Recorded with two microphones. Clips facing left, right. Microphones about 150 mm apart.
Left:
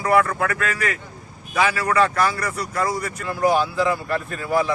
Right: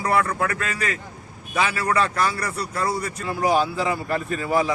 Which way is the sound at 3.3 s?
15° right (ahead or behind).